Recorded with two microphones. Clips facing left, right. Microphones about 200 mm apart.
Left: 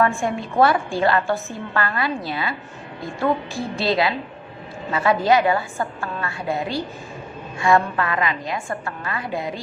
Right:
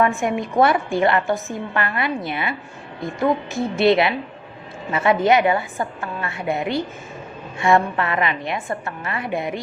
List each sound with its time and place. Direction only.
0.0 s a woman's voice: 20° right (ahead or behind)